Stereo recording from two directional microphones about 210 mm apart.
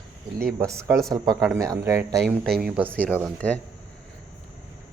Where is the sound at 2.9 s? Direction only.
5° left (ahead or behind).